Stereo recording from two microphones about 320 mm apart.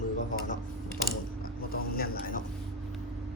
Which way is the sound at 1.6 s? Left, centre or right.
Left.